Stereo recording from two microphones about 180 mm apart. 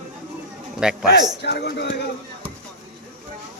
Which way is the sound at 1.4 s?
65° left (ahead or behind).